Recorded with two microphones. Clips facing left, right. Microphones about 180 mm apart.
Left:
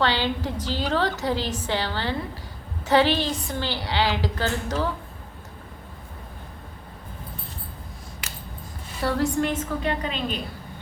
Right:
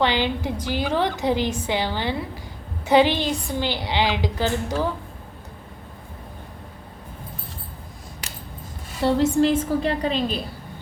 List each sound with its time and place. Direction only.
0.0 s a woman's voice: 15° right (ahead or behind)
9.0 s a woman's voice: 25° right (ahead or behind)